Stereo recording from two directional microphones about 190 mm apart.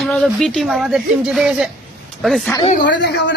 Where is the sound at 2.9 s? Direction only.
70° left (ahead or behind).